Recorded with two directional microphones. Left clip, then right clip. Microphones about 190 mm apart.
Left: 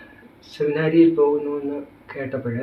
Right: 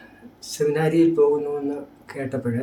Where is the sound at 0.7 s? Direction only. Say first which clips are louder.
Left 4 dB; 25° right (ahead or behind).